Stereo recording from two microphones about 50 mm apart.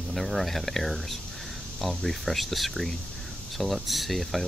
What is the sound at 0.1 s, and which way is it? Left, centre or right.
Speech, centre.